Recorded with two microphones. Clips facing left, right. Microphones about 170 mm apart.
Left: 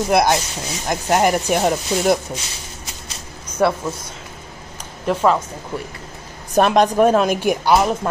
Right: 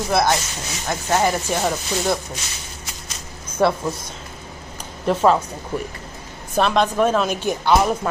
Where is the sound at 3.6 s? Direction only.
10° left (ahead or behind).